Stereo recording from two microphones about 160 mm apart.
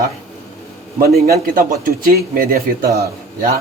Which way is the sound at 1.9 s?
65° right (ahead or behind).